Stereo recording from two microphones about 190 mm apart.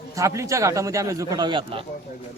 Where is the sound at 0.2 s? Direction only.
15° right (ahead or behind).